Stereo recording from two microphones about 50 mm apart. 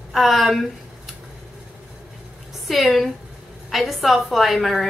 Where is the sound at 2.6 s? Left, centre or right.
Centre.